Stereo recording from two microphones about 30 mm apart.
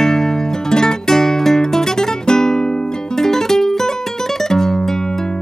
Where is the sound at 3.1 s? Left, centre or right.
Centre.